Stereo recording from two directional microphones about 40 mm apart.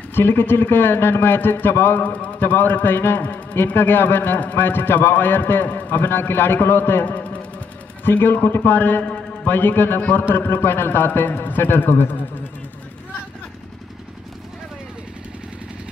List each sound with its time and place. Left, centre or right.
0.1 s speech: left
2.0 s a man's voice: left
2.5 s speech: left
7.1 s music: left
9.5 s speech: left
10.3 s speech: left